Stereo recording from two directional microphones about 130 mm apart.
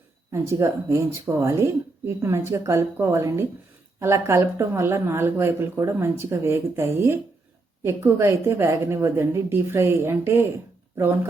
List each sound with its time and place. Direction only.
0.3 s speech: 20° right (ahead or behind)